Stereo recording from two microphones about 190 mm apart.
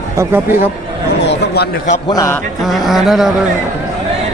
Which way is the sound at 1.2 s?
60° left (ahead or behind).